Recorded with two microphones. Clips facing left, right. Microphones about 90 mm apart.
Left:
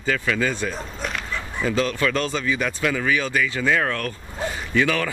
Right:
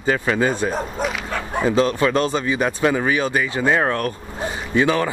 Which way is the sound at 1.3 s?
55° right (ahead or behind).